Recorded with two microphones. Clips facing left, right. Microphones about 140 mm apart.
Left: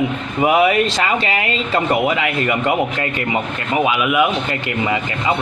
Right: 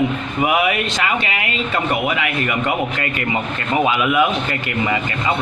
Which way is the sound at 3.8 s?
10° left (ahead or behind).